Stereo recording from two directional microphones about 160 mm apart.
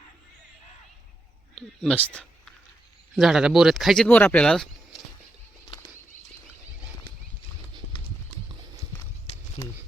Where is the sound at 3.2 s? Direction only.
Centre (ahead or behind).